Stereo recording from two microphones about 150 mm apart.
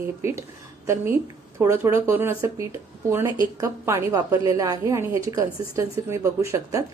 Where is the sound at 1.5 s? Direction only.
15° right (ahead or behind).